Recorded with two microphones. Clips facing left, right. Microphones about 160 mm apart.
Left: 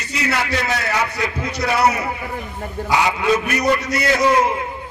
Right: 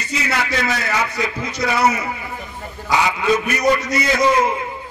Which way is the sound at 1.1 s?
60° left (ahead or behind).